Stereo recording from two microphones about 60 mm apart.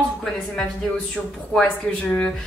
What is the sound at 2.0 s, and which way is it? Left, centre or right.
Speech, centre.